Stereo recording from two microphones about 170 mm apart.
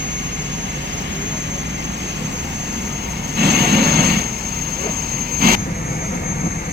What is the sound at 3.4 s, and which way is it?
Vehicle, 75° right (ahead or behind).